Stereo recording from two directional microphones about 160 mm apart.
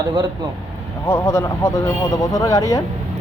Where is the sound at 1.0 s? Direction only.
15° left (ahead or behind).